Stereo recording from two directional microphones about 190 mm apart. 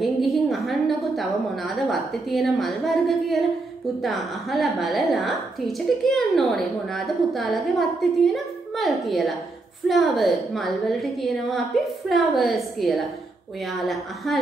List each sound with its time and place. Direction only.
0.0 s a woman's voice: centre (ahead or behind)